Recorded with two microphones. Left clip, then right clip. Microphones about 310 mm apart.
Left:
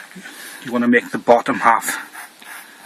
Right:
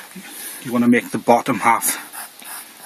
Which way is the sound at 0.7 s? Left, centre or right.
Right.